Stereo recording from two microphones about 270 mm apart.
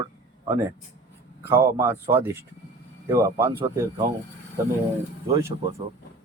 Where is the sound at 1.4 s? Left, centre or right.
Centre.